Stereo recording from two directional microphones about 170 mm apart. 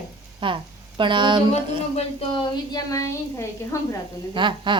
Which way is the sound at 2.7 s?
20° left (ahead or behind).